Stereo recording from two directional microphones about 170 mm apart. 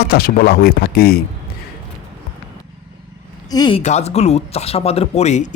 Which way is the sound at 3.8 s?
40° left (ahead or behind).